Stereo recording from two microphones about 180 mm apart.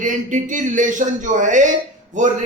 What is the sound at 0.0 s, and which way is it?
A man's voice, 45° right (ahead or behind).